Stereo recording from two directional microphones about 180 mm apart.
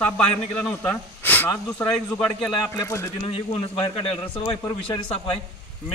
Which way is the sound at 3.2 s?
30° left (ahead or behind).